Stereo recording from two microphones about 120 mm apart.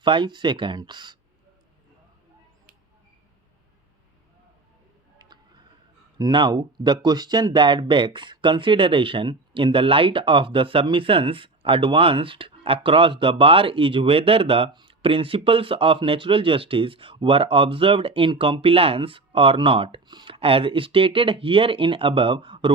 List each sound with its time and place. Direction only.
0.0 s speech: 40° right (ahead or behind)
5.1 s music: 35° right (ahead or behind)
6.1 s speech: 35° right (ahead or behind)